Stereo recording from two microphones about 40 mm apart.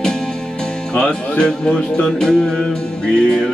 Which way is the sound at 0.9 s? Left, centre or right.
Left.